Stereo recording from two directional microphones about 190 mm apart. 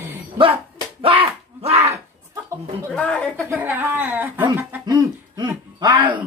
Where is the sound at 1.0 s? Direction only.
30° right (ahead or behind).